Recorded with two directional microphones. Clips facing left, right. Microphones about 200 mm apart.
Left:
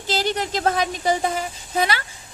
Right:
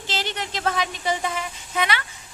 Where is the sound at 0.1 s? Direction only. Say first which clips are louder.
Left 7 dB; 40° left (ahead or behind).